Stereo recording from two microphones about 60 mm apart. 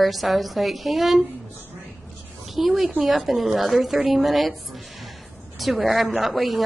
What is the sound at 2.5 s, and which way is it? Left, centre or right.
A woman's voice, centre.